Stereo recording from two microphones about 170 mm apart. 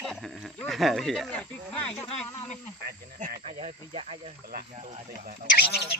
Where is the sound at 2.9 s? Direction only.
50° right (ahead or behind).